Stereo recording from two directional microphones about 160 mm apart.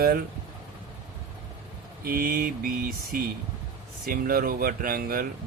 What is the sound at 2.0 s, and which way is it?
Speech, 65° right (ahead or behind).